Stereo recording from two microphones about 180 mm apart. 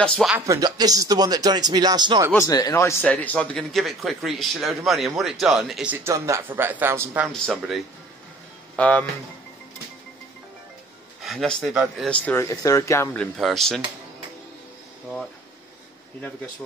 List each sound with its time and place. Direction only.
0.0 s speech: 5° left (ahead or behind)
0.5 s speech: 20° right (ahead or behind)
2.3 s speech: 20° left (ahead or behind); by 7.2 s 10° right (ahead or behind)
7.3 s speech: centre (ahead or behind)
11.2 s speech: centre (ahead or behind)
12.1 s speech: 10° left (ahead or behind)